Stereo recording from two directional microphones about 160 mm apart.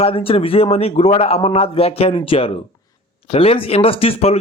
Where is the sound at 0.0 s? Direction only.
35° left (ahead or behind).